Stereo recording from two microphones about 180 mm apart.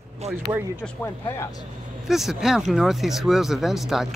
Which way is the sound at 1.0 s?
15° left (ahead or behind).